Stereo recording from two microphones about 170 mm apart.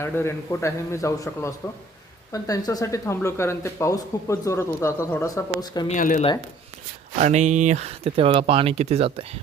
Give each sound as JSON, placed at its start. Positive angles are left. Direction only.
{"t": 0.0, "sound": "speech", "side_deg": 15}
{"t": 5.9, "sound": "speech", "side_deg": 50}
{"t": 7.2, "sound": "speech", "side_deg": -45}